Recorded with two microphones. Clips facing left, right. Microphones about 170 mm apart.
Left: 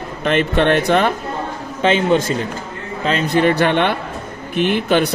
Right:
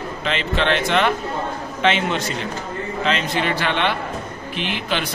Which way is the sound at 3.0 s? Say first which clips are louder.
Left 7 dB; 50° left (ahead or behind).